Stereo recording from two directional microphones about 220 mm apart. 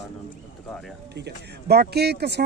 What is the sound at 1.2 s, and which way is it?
Speech, 45° right (ahead or behind).